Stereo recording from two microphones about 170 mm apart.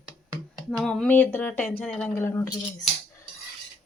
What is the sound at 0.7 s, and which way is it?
Speech, 5° left (ahead or behind).